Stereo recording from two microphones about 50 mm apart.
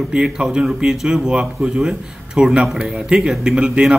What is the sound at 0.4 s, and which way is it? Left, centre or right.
A man's voice, right.